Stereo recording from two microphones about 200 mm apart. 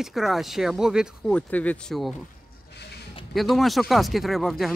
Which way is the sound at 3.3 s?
Centre (ahead or behind).